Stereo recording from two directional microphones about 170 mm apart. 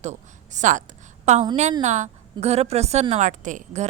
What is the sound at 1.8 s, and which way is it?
A woman's voice, 45° right (ahead or behind).